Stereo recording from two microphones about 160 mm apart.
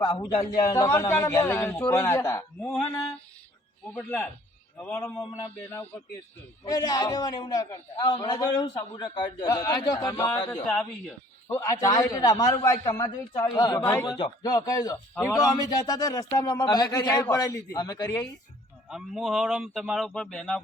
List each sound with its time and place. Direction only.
0.0 s a man's voice: 20° left (ahead or behind)
2.6 s a man's voice: 5° left (ahead or behind)
6.7 s a man's voice: 25° left (ahead or behind)
10.5 s a man's voice: 10° left (ahead or behind)
11.4 s a man's voice: 20° left (ahead or behind)
18.9 s speech: 5° right (ahead or behind)